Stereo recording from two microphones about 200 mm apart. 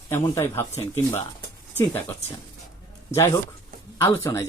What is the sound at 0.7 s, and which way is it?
Speech, 30° left (ahead or behind).